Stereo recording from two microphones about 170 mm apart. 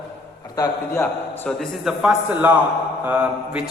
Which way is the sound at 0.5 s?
20° left (ahead or behind).